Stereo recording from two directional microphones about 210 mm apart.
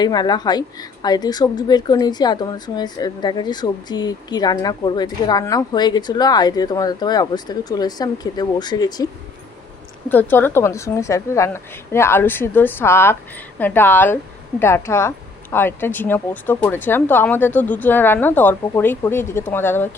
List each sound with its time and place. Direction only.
0.0 s a woman's voice: 20° left (ahead or behind)
10.1 s speech: 10° left (ahead or behind)